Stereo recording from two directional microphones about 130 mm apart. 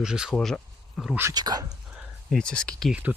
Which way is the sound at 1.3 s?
30° right (ahead or behind).